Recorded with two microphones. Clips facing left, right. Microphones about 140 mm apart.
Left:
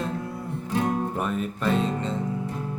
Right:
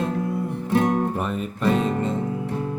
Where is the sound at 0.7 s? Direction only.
65° right (ahead or behind).